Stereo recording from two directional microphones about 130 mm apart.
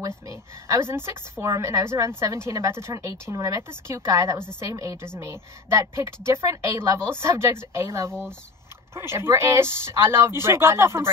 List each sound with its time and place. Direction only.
0.3 s a woman's voice: 20° right (ahead or behind)